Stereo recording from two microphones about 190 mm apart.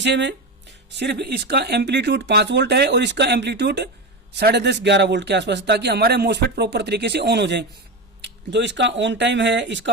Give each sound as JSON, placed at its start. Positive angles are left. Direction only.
{"t": 0.0, "sound": "speech", "side_deg": -70}